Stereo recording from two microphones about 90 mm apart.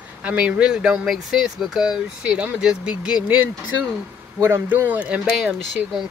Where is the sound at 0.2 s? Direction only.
15° right (ahead or behind).